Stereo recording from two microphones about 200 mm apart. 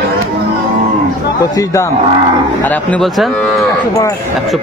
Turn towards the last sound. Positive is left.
turn(degrees=15)  # may be behind; listen again after turning